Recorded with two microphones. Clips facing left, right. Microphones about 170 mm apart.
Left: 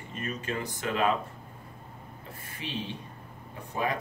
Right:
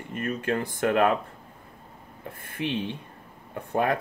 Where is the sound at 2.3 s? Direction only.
55° right (ahead or behind).